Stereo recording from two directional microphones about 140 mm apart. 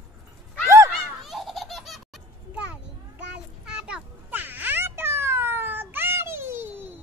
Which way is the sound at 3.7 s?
5° right (ahead or behind).